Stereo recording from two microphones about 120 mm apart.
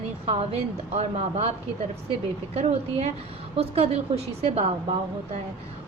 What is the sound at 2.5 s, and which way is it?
A woman's voice, 60° right (ahead or behind).